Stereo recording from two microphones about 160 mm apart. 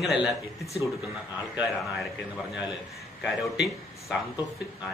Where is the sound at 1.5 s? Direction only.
Centre (ahead or behind).